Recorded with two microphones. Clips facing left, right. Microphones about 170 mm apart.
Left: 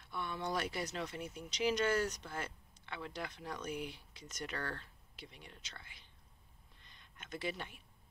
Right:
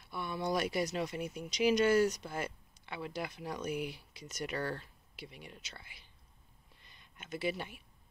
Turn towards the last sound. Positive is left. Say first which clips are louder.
# right 5 dB
turn(degrees=-10)  # may be behind; listen again after turning